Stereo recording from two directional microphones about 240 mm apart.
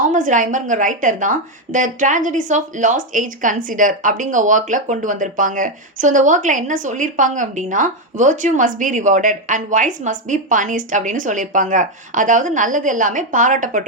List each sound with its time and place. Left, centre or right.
0.1 s a woman's voice: right